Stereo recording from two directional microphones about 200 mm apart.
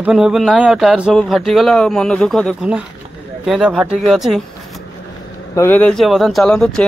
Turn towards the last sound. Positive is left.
turn(degrees=5)  # may be behind; listen again after turning